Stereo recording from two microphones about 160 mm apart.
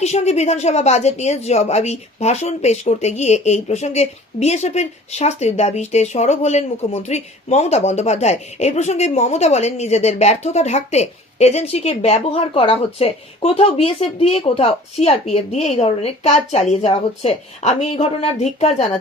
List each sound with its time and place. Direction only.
0.0 s a woman's voice: 45° left (ahead or behind)